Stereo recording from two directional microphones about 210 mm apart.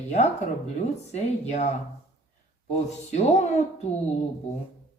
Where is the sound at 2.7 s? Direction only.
30° left (ahead or behind).